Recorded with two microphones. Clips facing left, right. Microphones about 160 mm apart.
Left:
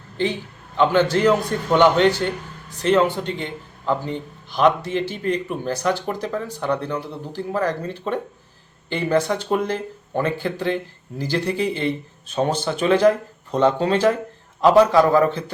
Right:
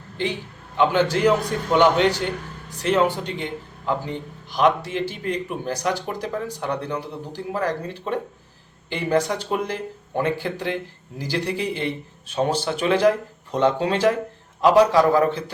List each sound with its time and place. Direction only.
0.8 s speech: 10° right (ahead or behind)